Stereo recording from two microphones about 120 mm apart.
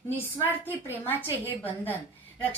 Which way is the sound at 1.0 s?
15° left (ahead or behind).